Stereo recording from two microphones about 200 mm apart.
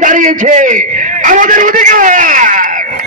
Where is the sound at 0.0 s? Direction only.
40° right (ahead or behind).